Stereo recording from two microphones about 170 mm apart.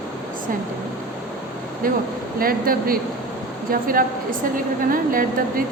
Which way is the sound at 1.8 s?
55° right (ahead or behind).